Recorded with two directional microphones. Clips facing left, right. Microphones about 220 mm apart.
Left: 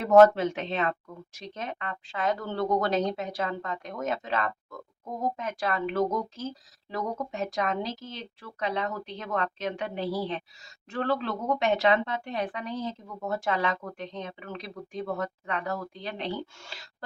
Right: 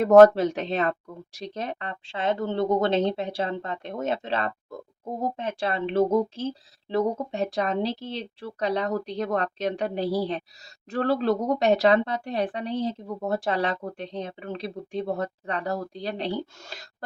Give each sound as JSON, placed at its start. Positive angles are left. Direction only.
{"t": 0.0, "sound": "speech", "side_deg": -40}